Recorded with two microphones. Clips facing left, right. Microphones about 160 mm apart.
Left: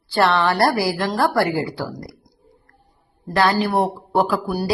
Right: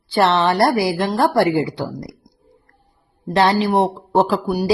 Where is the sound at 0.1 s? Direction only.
20° right (ahead or behind).